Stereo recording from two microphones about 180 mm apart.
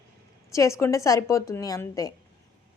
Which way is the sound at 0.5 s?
15° left (ahead or behind).